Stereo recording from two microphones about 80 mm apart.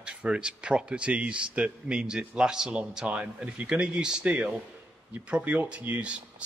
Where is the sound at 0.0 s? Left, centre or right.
Centre.